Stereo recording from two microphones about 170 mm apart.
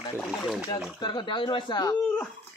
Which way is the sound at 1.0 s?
30° left (ahead or behind).